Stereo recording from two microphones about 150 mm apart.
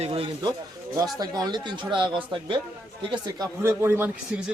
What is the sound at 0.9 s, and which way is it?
Speech, 25° right (ahead or behind).